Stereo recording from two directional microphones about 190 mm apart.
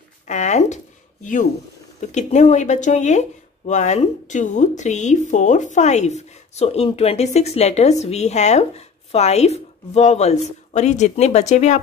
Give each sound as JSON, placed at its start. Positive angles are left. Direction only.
{"t": 0.3, "sound": "speech", "side_deg": 40}